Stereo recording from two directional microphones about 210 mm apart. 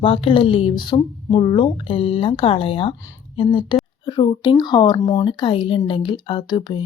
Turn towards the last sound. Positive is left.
turn(degrees=20)  # may be behind; listen again after turning